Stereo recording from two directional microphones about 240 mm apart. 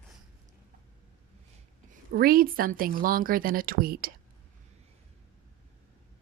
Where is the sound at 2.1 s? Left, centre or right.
Right.